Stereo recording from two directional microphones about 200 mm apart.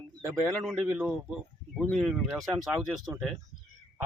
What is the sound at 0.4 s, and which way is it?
Speech, centre (ahead or behind).